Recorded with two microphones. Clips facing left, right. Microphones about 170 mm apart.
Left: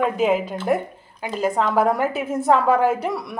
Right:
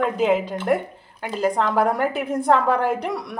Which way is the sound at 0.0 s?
5° left (ahead or behind).